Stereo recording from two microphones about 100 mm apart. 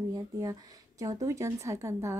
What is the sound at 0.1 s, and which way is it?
Speech, 40° right (ahead or behind).